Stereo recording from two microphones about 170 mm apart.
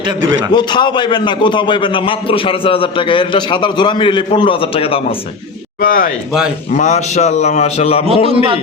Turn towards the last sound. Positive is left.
turn(degrees=40)  # may be behind; listen again after turning